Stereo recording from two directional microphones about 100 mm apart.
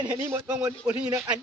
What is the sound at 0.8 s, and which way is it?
Speech, 10° right (ahead or behind).